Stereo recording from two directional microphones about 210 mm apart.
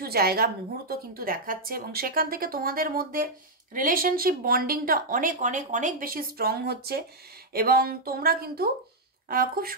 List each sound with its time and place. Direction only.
0.0 s speech: 45° right (ahead or behind)